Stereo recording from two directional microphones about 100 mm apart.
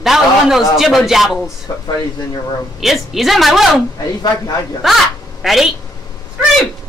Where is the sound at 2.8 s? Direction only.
Centre (ahead or behind).